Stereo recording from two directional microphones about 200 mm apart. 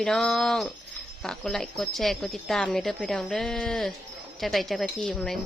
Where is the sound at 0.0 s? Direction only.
Centre (ahead or behind).